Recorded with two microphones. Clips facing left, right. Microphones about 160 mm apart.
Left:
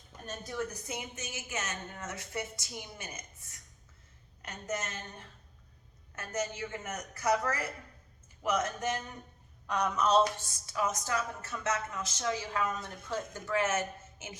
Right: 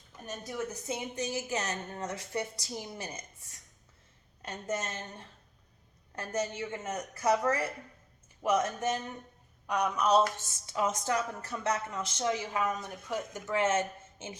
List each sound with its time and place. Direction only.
0.3 s a woman's voice: 15° right (ahead or behind); by 3.2 s 35° right (ahead or behind)
4.4 s a woman's voice: 30° right (ahead or behind)
6.1 s a woman's voice: 30° right (ahead or behind)
9.6 s speech: 15° right (ahead or behind)
10.7 s a woman's voice: 25° right (ahead or behind)